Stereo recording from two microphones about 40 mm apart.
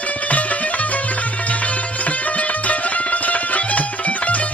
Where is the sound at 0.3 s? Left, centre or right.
Left.